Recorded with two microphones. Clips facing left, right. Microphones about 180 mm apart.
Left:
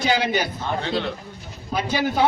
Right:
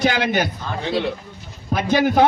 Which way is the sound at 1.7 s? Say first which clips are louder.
Right 5 dB; 55° right (ahead or behind).